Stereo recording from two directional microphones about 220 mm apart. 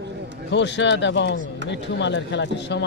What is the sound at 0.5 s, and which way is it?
Speech, 55° left (ahead or behind).